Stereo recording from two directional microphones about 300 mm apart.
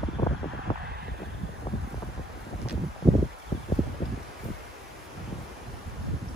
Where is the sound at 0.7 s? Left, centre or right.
Centre.